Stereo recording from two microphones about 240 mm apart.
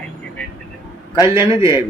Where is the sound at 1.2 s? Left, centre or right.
Centre.